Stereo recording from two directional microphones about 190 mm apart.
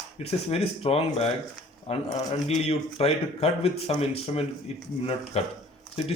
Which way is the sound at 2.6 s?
30° left (ahead or behind).